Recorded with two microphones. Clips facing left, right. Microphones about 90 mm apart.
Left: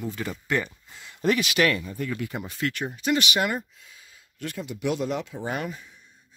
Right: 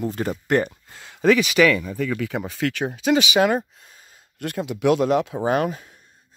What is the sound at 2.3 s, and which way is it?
Speech, 90° right.